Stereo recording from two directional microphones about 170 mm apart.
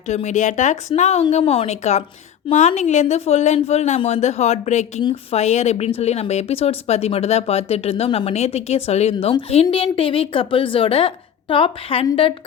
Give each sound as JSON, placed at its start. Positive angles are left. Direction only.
{"t": 0.1, "sound": "speech", "side_deg": 45}